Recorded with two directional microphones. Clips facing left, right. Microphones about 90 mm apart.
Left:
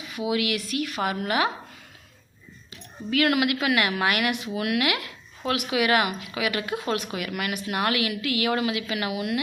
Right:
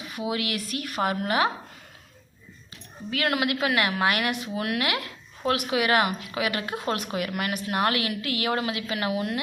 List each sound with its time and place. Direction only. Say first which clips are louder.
0.3 s a woman's voice: left 3 dB; 35° right (ahead or behind)
3.1 s a woman's voice: left 3 dB; 30° right (ahead or behind)